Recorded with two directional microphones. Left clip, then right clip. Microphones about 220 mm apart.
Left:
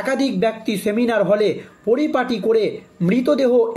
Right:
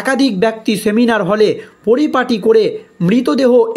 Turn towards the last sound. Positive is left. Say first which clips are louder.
# right 4 dB
turn(degrees=-40)  # may be behind; listen again after turning